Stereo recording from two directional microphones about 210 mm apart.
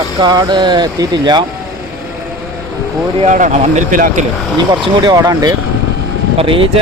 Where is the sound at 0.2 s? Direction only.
20° right (ahead or behind).